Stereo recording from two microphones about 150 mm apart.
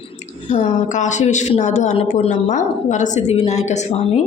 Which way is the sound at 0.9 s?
55° left (ahead or behind).